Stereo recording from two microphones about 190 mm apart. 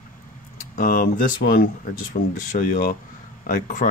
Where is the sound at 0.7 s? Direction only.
45° left (ahead or behind).